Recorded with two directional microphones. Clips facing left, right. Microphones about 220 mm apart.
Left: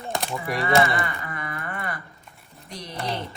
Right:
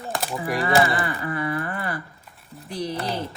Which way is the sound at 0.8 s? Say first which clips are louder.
Right 2 dB; 30° right (ahead or behind).